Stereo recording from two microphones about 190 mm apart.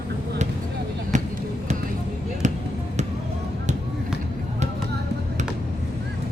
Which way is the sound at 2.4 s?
40° right (ahead or behind).